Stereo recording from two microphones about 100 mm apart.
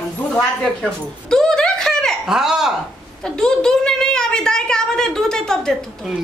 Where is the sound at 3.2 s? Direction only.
5° left (ahead or behind).